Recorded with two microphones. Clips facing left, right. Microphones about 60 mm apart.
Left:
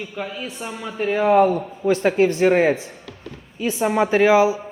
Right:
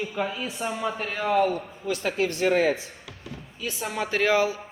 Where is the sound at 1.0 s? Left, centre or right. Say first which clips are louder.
Left 10 dB; centre.